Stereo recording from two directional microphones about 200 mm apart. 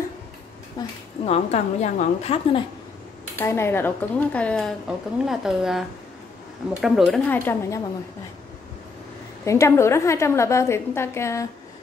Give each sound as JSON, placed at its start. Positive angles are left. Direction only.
{"t": 0.8, "sound": "a woman's voice", "side_deg": 20}
{"t": 1.2, "sound": "a woman's voice", "side_deg": 35}
{"t": 3.3, "sound": "a woman's voice", "side_deg": 10}
{"t": 9.4, "sound": "a woman's voice", "side_deg": 15}